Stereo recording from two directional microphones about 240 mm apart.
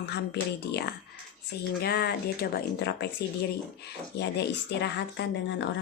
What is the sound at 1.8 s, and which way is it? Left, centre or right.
Speech, left.